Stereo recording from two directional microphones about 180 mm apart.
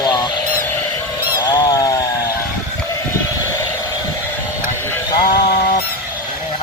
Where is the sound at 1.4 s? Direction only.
20° left (ahead or behind).